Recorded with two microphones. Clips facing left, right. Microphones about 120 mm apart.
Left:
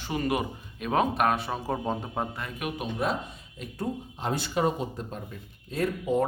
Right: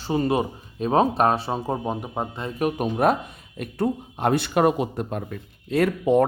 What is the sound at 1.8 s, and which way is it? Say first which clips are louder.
Speech: right 3 dB; 15° right (ahead or behind).